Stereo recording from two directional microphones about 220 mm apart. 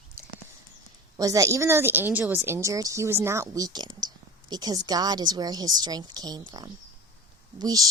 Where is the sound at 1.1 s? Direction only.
15° right (ahead or behind).